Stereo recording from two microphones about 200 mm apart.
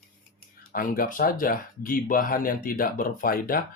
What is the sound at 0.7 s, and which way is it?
Speech, 45° left (ahead or behind).